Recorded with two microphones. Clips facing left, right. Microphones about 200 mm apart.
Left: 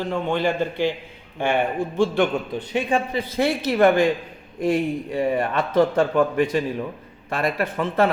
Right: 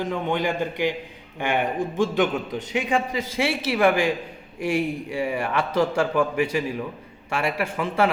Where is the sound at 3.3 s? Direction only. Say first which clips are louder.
Left 4 dB; 10° right (ahead or behind).